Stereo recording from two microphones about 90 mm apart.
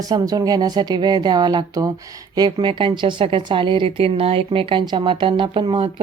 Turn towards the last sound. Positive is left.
turn(degrees=-65)  # may be behind; listen again after turning